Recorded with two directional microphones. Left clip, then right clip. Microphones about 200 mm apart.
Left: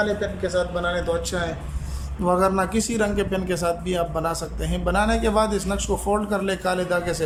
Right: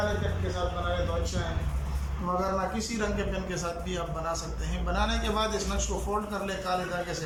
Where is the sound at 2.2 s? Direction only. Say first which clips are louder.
Left 9 dB; 50° left (ahead or behind).